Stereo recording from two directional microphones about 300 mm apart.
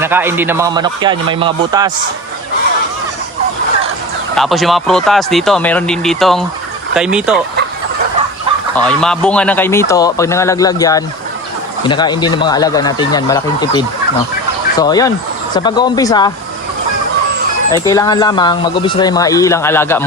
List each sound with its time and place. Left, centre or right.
0.0 s a man's voice: centre
4.4 s speech: centre
8.7 s speech: centre
17.7 s speech: centre